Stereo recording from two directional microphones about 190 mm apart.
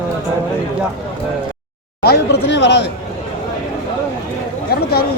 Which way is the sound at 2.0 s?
60° left (ahead or behind).